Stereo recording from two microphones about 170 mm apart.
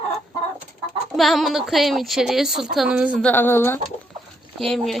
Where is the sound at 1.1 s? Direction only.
Centre (ahead or behind).